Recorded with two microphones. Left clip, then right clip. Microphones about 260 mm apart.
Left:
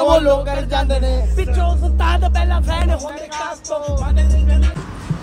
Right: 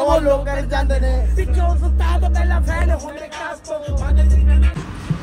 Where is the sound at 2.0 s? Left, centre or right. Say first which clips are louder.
Left 5 dB; left.